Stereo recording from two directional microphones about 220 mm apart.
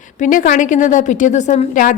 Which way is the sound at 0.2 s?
35° left (ahead or behind).